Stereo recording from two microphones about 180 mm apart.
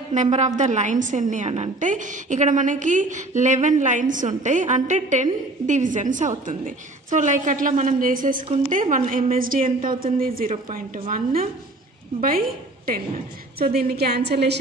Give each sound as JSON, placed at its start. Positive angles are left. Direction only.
{"t": 0.1, "sound": "a woman's voice", "side_deg": -40}